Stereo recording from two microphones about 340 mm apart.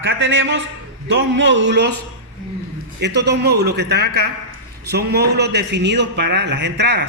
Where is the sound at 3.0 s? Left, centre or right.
Right.